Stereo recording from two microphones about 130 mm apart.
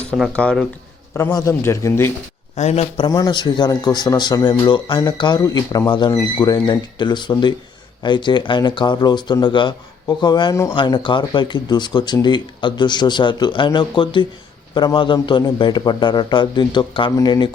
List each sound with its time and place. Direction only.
0.3 s speech: 5° left (ahead or behind)
1.1 s speech: 25° left (ahead or behind)
2.6 s a man's voice: 60° left (ahead or behind)
3.1 s speech: 30° left (ahead or behind)
10.5 s speech: 25° left (ahead or behind)
10.8 s speech: 35° left (ahead or behind)